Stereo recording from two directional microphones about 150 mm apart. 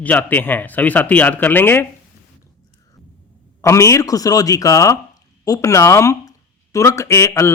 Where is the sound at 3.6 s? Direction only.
20° left (ahead or behind).